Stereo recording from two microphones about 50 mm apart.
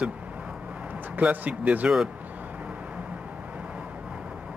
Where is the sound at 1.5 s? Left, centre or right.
Right.